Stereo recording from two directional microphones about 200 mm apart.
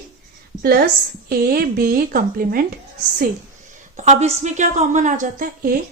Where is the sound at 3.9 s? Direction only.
35° right (ahead or behind).